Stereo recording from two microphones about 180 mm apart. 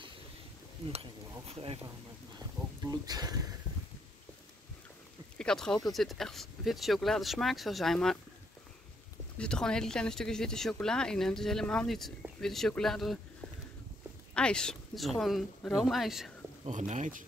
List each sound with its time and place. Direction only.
1.5 s speech: 35° right (ahead or behind)
2.8 s speech: 20° right (ahead or behind)
5.4 s speech: 5° left (ahead or behind)
9.4 s speech: 5° left (ahead or behind)
14.3 s speech: 5° left (ahead or behind)
16.6 s speech: 40° right (ahead or behind)